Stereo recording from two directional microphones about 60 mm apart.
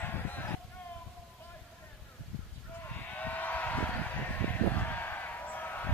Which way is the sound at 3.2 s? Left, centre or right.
Left.